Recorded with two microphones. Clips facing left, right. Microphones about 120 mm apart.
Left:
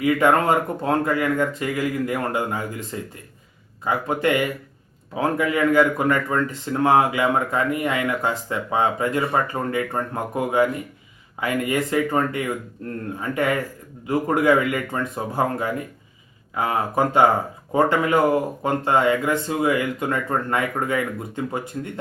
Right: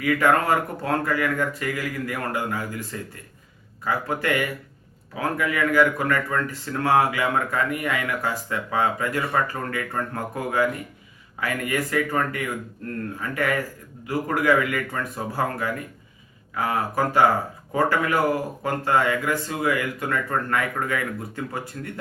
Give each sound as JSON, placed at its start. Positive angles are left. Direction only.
{"t": 0.0, "sound": "speech", "side_deg": 20}